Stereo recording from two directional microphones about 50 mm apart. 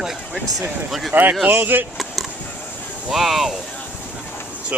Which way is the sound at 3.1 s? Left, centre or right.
Centre.